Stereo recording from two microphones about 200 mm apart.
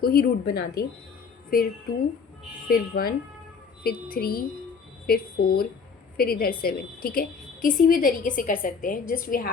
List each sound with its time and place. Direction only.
0.0 s a woman's voice: 50° left (ahead or behind)